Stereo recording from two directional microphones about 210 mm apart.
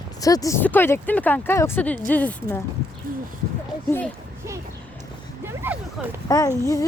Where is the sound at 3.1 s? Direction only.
40° right (ahead or behind).